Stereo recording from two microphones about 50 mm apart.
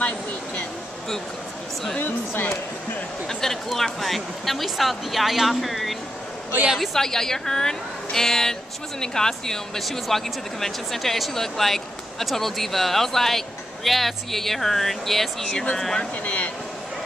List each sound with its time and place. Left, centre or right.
2.0 s speech: left
3.3 s a woman's voice: centre
16.3 s speech: left